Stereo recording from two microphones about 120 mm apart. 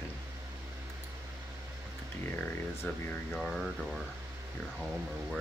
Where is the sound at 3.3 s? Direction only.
Centre (ahead or behind).